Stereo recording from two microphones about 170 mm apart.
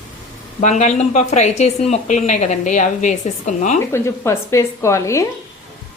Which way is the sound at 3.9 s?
15° left (ahead or behind).